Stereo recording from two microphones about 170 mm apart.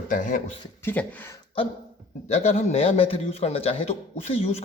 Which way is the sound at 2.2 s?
40° left (ahead or behind).